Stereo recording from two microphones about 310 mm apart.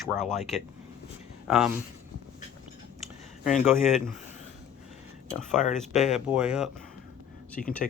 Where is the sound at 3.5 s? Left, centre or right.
Centre.